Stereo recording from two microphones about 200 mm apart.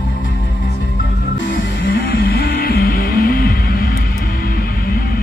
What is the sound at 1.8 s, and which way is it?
Music, 50° left (ahead or behind).